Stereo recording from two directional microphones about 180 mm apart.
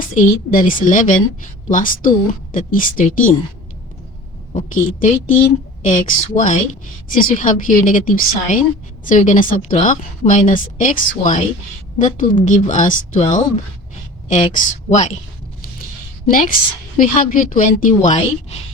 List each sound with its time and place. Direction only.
0.0 s a woman's voice: 50° left (ahead or behind)
4.5 s a woman's voice: 45° left (ahead or behind)
16.3 s a woman's voice: 50° left (ahead or behind)